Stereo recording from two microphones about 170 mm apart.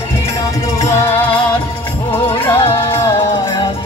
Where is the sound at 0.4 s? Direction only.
20° left (ahead or behind).